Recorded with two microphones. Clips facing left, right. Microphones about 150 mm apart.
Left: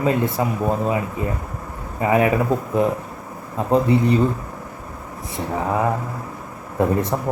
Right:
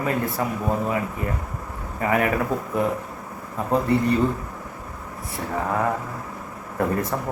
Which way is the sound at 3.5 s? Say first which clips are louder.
Left 4 dB; 20° left (ahead or behind).